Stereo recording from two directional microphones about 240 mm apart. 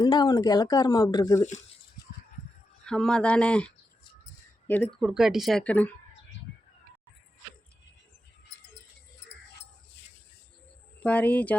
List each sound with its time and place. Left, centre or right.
0.0 s speech: centre
2.8 s speech: centre
4.9 s speech: centre
11.0 s speech: centre